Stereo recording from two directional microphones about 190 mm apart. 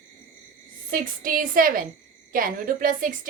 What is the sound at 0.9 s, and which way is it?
A woman's voice, 45° right (ahead or behind).